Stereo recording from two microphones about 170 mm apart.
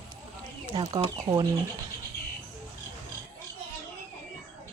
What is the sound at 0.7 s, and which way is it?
Speech, 25° right (ahead or behind).